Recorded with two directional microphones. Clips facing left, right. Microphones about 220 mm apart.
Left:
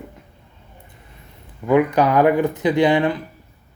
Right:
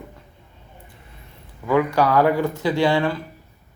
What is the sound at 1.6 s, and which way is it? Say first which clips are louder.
Speech: left 3 dB; 20° left (ahead or behind).